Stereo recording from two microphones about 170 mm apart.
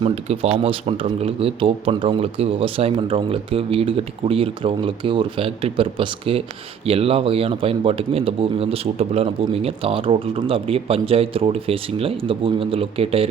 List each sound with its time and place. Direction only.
0.0 s speech: 35° right (ahead or behind)